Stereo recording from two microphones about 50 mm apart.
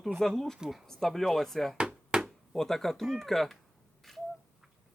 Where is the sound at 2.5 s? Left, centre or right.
Centre.